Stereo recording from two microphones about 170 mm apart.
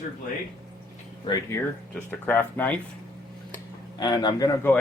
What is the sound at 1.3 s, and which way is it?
Speech, 25° left (ahead or behind).